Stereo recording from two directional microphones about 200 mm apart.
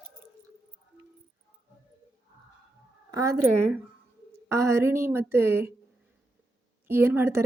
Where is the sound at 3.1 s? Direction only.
15° right (ahead or behind).